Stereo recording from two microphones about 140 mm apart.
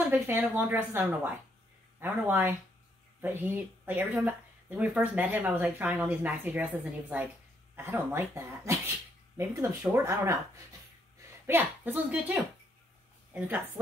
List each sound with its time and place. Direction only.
0.1 s speech: 15° right (ahead or behind)
11.4 s speech: 15° right (ahead or behind)